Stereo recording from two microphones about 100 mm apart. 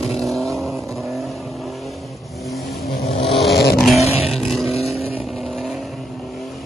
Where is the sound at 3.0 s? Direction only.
90° left.